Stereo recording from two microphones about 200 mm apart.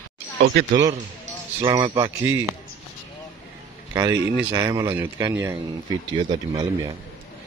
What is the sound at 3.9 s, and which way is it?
Speech, 15° right (ahead or behind).